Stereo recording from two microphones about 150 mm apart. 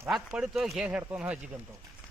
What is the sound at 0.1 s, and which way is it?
Speech, 5° right (ahead or behind).